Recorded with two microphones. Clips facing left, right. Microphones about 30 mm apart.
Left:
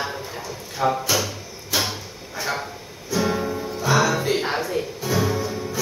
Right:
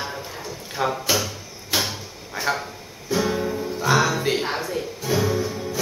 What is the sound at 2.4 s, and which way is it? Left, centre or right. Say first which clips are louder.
Speech: right 3 dB; right.